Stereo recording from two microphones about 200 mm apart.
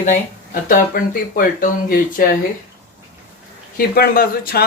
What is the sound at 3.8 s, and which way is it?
Speech, 50° left (ahead or behind).